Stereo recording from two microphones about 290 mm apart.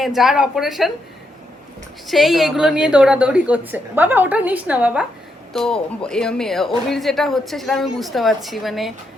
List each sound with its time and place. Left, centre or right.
0.0 s speech: centre
2.0 s speech: centre